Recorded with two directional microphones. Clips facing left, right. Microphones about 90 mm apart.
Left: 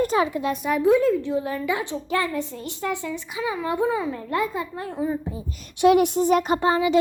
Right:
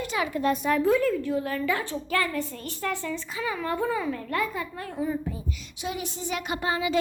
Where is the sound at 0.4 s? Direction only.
Centre (ahead or behind).